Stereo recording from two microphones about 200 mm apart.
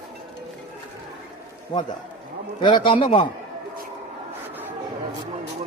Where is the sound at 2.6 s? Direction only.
25° left (ahead or behind).